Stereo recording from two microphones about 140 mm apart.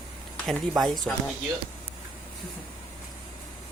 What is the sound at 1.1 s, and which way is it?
Speech, 5° left (ahead or behind).